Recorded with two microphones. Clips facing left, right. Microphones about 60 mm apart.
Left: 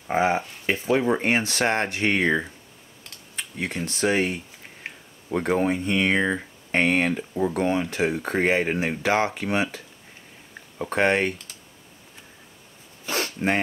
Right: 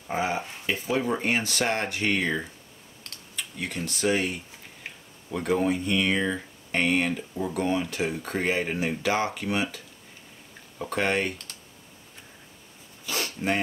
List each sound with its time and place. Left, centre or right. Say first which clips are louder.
0.1 s speech: left 6 dB; left
10.9 s speech: left 5 dB; left
13.0 s a sound: left 4 dB; left